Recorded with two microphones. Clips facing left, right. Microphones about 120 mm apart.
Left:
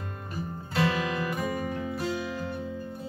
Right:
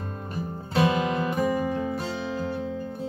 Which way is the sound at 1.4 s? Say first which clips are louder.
Right 6 dB; 40° right (ahead or behind).